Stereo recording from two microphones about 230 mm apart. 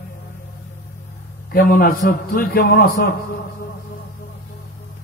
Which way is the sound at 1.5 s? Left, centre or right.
Left.